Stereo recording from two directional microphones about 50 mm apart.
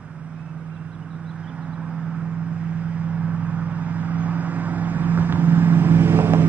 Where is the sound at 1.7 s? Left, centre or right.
Centre.